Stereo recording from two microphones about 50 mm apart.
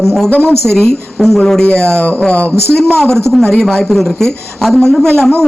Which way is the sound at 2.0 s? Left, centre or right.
Left.